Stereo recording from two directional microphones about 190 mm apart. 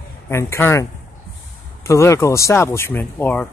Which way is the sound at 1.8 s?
15° left (ahead or behind).